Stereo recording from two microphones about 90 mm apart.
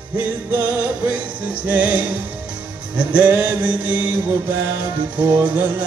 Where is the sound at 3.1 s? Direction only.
20° right (ahead or behind).